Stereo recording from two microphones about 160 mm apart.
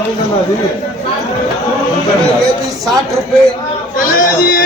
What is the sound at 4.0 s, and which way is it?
Speech, 60° left (ahead or behind).